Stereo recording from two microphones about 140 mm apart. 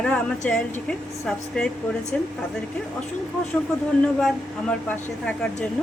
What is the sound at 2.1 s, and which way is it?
Speech, 10° left (ahead or behind).